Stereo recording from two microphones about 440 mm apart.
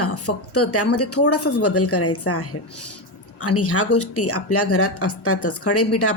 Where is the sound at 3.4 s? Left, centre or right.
Left.